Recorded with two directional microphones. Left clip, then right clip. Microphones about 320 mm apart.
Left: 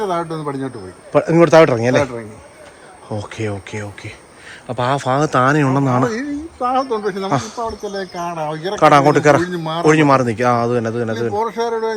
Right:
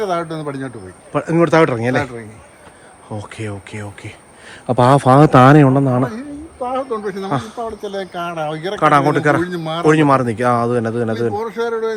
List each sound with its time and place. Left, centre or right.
0.0 s a man's voice: centre
4.6 s speech: centre
6.1 s a sound: left
7.0 s a man's voice: centre
7.3 s speech: centre
11.3 s a man's voice: centre